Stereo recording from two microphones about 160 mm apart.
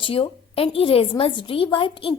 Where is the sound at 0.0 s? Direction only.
35° left (ahead or behind).